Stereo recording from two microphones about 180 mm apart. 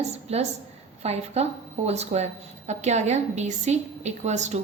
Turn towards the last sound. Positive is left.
turn(degrees=-40)  # may be behind; listen again after turning